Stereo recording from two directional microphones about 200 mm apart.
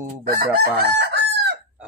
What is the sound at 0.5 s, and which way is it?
Chicken, 50° right (ahead or behind).